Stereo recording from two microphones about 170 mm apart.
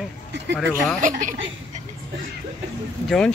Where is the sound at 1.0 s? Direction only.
50° right (ahead or behind).